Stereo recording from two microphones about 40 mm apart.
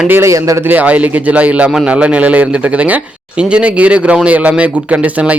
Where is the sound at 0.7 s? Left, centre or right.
Right.